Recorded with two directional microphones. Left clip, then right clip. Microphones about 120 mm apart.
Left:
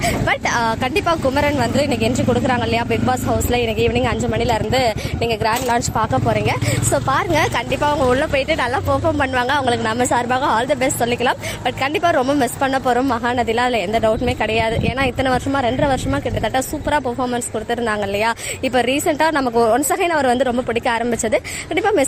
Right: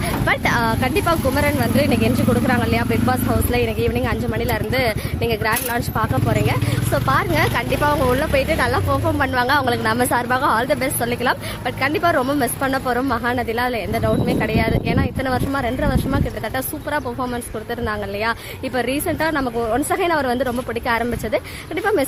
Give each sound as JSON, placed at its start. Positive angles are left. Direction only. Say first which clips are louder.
{"t": 0.0, "sound": "speech", "louder": "left 1 dB", "side_deg": 30}
{"t": 4.4, "sound": "a woman's voice", "louder": "left 3 dB", "side_deg": 0}
{"t": 5.6, "sound": "speech", "louder": "left 4 dB", "side_deg": 25}
{"t": 8.0, "sound": "speech", "louder": "left 2 dB", "side_deg": 35}
{"t": 9.0, "sound": "speech", "louder": "left 2 dB", "side_deg": 20}
{"t": 9.3, "sound": "a woman's voice", "louder": "even", "side_deg": 5}
{"t": 20.1, "sound": "a woman's voice", "louder": "left 3 dB", "side_deg": 15}